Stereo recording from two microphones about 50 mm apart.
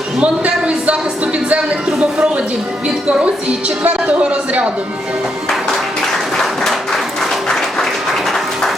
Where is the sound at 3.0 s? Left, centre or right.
Right.